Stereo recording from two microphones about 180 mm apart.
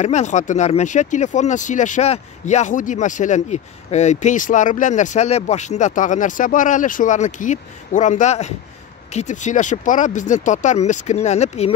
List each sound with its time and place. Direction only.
0.0 s speech: 40° left (ahead or behind)